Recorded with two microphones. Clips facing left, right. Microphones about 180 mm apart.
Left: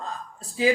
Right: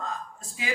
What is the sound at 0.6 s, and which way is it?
Speech, 35° left (ahead or behind).